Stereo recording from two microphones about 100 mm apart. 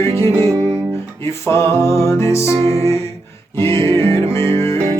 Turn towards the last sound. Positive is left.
turn(degrees=30)  # may be behind; listen again after turning